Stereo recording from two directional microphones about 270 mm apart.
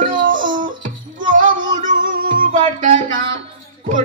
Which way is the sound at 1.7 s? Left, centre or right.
Right.